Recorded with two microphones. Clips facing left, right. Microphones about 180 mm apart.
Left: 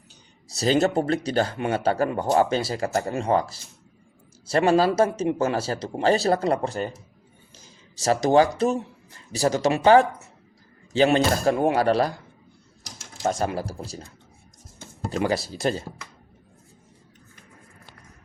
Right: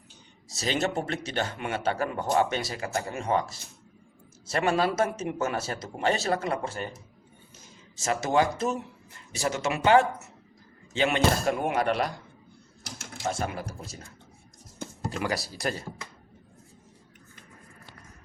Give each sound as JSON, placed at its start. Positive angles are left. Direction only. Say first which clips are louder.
{"t": 0.4, "sound": "a man's voice", "louder": "left 8 dB", "side_deg": 35}
{"t": 7.9, "sound": "a man's voice", "louder": "left 6 dB", "side_deg": 35}
{"t": 12.8, "sound": "a sound", "louder": "right 3 dB", "side_deg": -55}
{"t": 13.2, "sound": "a man's voice", "louder": "left 6 dB", "side_deg": 40}
{"t": 15.2, "sound": "speech", "louder": "left 7 dB", "side_deg": 25}